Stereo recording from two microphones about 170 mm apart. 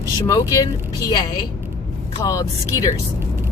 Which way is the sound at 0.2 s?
20° left (ahead or behind).